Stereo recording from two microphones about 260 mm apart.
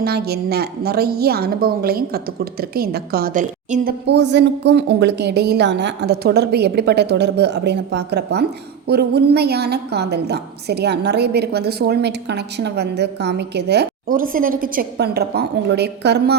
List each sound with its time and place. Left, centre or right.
0.0 s a woman's voice: right